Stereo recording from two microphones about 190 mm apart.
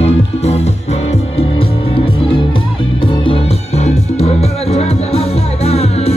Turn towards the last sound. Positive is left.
turn(degrees=35)  # may be behind; listen again after turning